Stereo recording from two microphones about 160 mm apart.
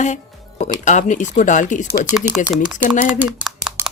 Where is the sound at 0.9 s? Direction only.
50° left (ahead or behind).